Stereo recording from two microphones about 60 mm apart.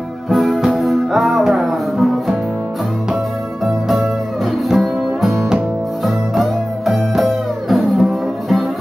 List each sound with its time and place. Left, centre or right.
0.3 s music: centre
3.6 s music: centre